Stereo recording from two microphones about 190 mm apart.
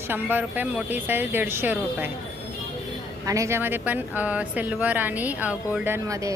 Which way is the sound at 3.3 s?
15° right (ahead or behind).